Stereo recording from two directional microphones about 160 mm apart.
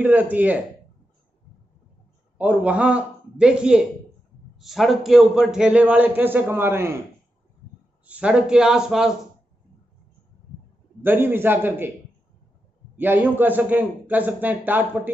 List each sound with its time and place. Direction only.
0.0 s a man's voice: 10° right (ahead or behind)
2.3 s a man's voice: 10° right (ahead or behind)
8.1 s a man's voice: 5° right (ahead or behind)
11.0 s a man's voice: 10° right (ahead or behind)
12.9 s a man's voice: 10° right (ahead or behind)